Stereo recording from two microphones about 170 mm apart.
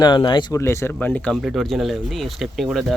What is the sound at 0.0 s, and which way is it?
Speech, 25° left (ahead or behind).